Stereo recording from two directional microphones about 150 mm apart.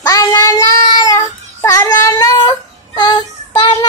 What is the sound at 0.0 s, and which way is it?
Child singing, 25° left (ahead or behind).